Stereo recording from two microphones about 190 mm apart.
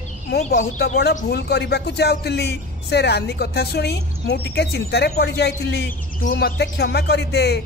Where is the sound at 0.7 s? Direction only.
60° left (ahead or behind).